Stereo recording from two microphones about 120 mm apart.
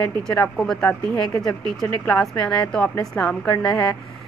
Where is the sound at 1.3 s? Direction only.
25° left (ahead or behind).